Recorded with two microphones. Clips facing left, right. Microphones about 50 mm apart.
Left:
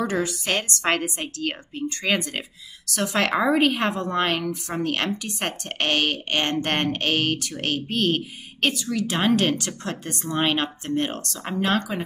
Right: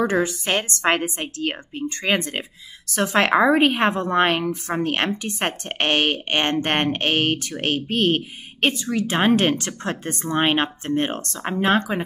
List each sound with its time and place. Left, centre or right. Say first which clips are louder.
0.0 s a woman's voice: right 4 dB; right